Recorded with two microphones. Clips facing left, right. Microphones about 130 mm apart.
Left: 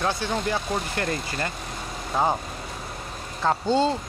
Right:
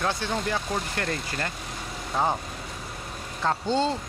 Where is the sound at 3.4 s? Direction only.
5° left (ahead or behind).